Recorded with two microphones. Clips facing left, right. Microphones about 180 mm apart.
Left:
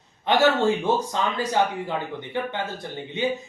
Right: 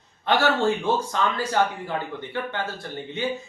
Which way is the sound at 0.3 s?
20° left (ahead or behind).